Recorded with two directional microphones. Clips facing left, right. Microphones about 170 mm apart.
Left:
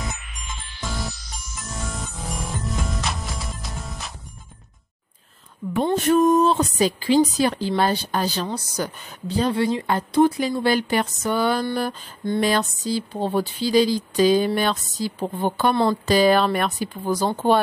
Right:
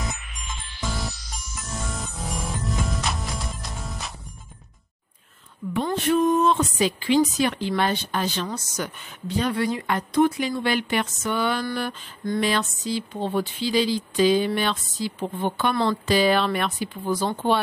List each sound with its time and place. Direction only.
0.7 s music: centre (ahead or behind)
6.0 s speech: 45° left (ahead or behind)